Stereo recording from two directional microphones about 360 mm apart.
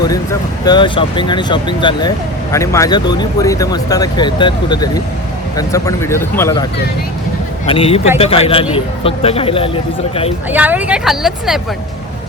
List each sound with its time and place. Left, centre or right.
0.6 s speech: centre
7.7 s speech: centre
10.5 s speech: centre